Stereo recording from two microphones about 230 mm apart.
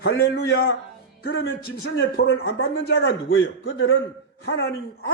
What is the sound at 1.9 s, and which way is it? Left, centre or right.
A man's voice, left.